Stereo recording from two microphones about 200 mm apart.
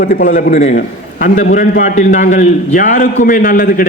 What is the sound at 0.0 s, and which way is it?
A man's voice, 40° left (ahead or behind).